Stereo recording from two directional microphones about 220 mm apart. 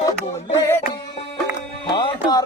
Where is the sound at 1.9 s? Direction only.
20° left (ahead or behind).